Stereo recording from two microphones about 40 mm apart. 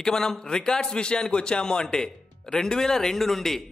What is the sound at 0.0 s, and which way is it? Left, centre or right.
A man's voice, centre.